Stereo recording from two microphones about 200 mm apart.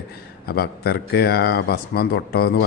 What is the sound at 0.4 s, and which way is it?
Speech, 50° left (ahead or behind).